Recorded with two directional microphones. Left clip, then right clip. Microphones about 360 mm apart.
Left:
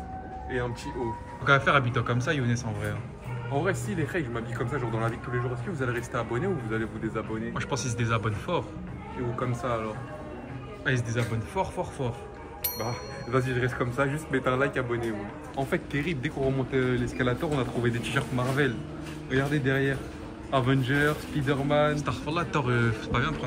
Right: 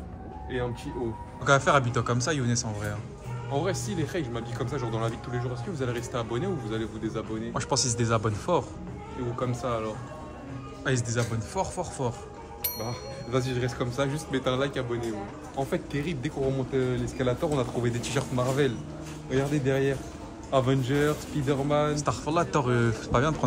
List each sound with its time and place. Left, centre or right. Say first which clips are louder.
1.4 s a man's voice: even; centre
11.1 s a man's voice: even; centre
21.9 s a man's voice: right 3 dB; centre